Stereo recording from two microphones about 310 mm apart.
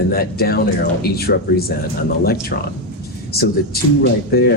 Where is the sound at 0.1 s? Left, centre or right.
Left.